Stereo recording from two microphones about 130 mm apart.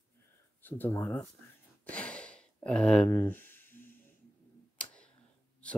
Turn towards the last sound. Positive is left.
turn(degrees=10)  # may be behind; listen again after turning